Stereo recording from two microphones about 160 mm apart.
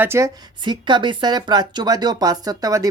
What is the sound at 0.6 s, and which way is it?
Speech, 30° right (ahead or behind).